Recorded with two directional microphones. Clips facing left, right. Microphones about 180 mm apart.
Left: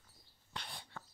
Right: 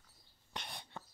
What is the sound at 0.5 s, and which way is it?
Whispering, 20° right (ahead or behind).